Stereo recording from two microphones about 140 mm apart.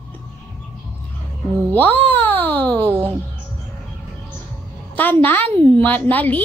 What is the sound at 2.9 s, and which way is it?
Speech, 15° right (ahead or behind).